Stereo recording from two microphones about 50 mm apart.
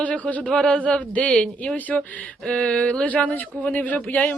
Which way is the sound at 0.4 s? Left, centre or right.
Centre.